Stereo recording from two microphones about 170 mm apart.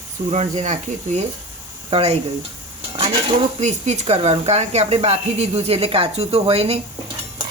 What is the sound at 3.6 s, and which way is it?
Speech, 40° right (ahead or behind).